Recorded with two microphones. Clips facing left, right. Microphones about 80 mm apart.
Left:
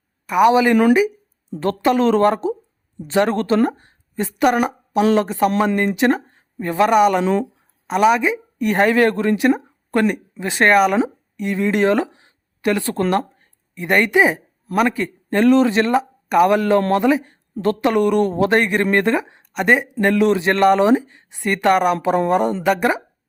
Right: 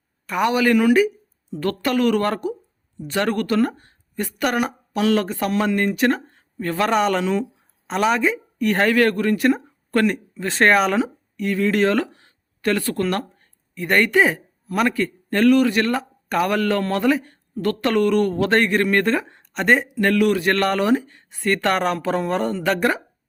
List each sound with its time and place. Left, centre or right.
0.3 s a woman's voice: centre
7.2 s a woman's voice: left
7.9 s a woman's voice: centre
10.9 s a woman's voice: left
20.0 s a woman's voice: left